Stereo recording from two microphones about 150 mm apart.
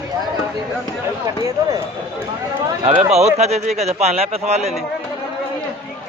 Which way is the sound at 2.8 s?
45° right (ahead or behind).